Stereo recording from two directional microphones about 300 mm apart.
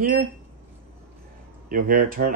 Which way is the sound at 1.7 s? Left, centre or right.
Right.